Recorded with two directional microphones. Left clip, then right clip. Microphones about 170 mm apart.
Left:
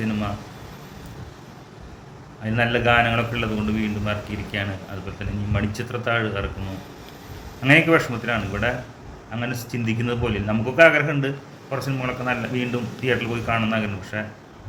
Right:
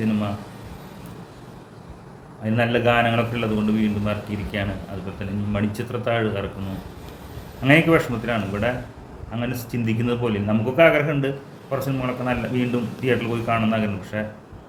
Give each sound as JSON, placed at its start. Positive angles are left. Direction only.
{"t": 2.4, "sound": "a man's voice", "side_deg": -15}
{"t": 7.6, "sound": "a man's voice", "side_deg": -15}